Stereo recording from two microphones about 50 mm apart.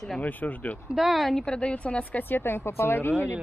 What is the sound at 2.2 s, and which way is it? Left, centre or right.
Speech, left.